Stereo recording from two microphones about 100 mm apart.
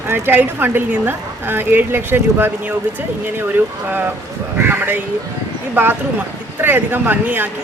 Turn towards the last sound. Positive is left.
turn(degrees=-20)  # may be behind; listen again after turning